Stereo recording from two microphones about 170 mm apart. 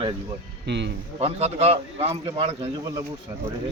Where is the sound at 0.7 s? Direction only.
90° right.